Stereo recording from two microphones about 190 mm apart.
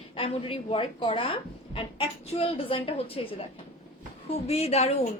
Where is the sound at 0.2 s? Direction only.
30° left (ahead or behind).